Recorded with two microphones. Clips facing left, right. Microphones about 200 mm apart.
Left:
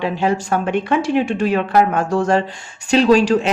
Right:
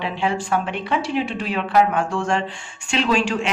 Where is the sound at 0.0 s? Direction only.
40° left (ahead or behind).